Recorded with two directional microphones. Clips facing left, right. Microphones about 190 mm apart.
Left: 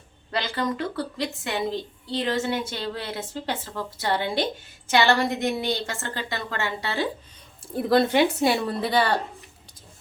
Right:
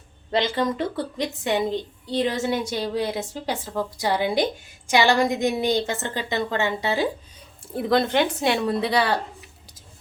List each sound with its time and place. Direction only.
0.3 s a woman's voice: 20° right (ahead or behind)
7.8 s a woman's voice: centre (ahead or behind)